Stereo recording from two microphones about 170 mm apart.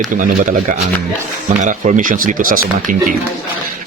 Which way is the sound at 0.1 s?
55° right (ahead or behind).